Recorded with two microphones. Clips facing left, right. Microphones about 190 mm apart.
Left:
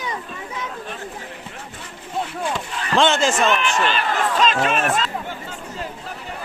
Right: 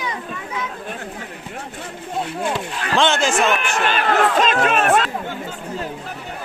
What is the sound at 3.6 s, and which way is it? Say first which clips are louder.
Speech: right 1 dB; 50° right (ahead or behind).